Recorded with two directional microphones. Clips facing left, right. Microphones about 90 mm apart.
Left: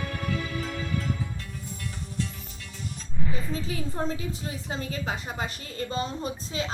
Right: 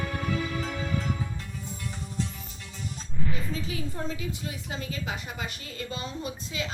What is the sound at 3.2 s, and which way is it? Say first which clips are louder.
Music: even; 20° left (ahead or behind).